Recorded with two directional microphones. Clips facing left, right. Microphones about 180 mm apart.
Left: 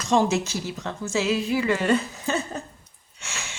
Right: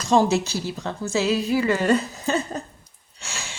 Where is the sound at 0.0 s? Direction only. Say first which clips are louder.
Right 2 dB; 35° right (ahead or behind).